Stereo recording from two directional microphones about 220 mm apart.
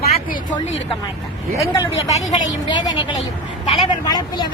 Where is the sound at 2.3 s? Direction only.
20° left (ahead or behind).